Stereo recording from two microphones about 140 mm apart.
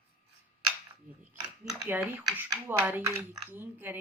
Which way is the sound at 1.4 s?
10° right (ahead or behind).